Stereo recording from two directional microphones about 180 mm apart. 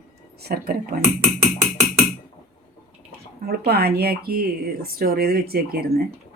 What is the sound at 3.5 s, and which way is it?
Speech, 60° right (ahead or behind).